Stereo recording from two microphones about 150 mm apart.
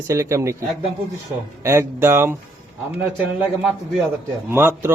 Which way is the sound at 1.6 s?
20° right (ahead or behind).